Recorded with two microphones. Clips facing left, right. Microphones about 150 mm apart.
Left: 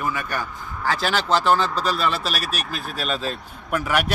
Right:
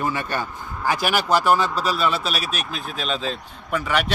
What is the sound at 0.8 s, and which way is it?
Speech, 15° right (ahead or behind).